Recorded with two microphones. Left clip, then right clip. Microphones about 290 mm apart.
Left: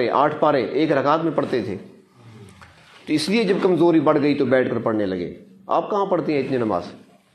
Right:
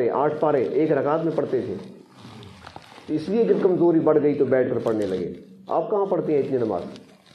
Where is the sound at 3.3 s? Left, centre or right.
Left.